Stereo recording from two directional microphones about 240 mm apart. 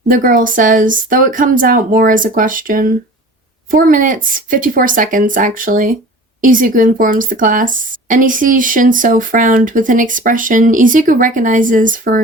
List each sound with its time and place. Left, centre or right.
0.1 s a woman's voice: right